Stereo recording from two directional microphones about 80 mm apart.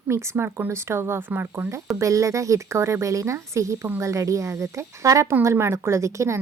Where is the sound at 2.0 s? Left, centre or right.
Right.